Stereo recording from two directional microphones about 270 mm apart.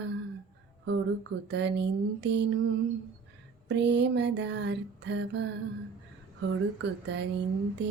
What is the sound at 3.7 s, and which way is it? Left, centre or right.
Music, right.